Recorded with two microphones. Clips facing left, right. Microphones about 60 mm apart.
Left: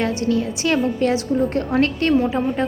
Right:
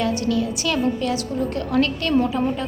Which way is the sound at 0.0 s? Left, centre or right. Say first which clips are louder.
Left 1 dB; left.